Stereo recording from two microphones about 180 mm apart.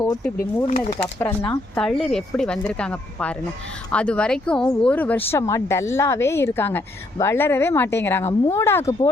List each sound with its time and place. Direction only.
0.3 s speech: 45° left (ahead or behind)
1.2 s speech: 10° left (ahead or behind)